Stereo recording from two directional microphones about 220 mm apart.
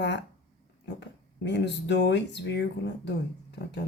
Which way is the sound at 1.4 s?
50° left (ahead or behind).